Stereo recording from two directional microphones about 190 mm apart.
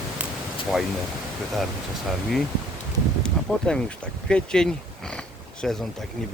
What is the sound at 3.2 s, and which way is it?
Speech, 5° left (ahead or behind).